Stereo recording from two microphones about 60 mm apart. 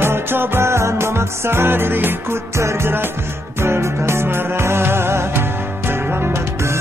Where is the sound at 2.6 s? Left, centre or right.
Right.